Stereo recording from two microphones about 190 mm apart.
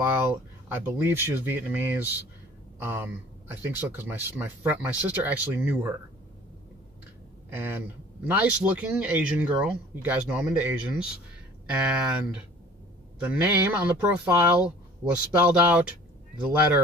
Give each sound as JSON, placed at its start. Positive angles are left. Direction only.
{"t": 0.0, "sound": "speech", "side_deg": -10}
{"t": 7.4, "sound": "speech", "side_deg": -10}
{"t": 15.5, "sound": "speech", "side_deg": -10}